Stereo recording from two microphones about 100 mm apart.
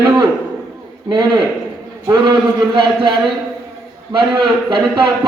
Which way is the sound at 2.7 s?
55° right (ahead or behind).